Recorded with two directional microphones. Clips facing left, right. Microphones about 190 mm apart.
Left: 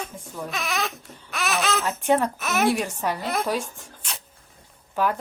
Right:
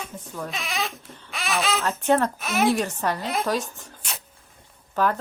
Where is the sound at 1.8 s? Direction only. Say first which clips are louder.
Right 1 dB; 10° left (ahead or behind).